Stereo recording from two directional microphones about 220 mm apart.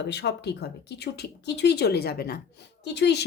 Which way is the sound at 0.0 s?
50° left (ahead or behind).